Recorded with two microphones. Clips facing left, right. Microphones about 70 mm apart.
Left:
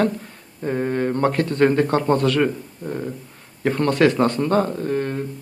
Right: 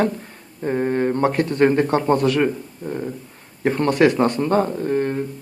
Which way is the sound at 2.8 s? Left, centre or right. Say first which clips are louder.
Right 1 dB; centre.